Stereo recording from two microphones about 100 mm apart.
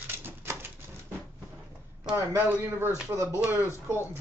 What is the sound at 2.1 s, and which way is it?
Speech, 25° right (ahead or behind).